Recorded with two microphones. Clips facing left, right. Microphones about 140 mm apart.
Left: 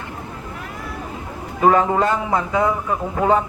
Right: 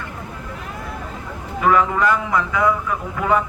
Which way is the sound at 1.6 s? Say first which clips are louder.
Left 2 dB; 35° left (ahead or behind).